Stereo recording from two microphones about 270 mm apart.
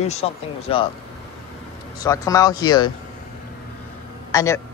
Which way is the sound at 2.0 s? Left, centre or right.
Centre.